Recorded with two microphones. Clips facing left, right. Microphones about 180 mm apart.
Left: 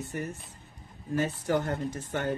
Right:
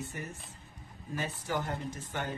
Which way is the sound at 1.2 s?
55° left (ahead or behind).